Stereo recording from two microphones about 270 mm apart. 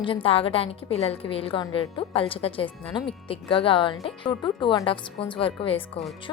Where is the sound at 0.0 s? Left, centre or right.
Centre.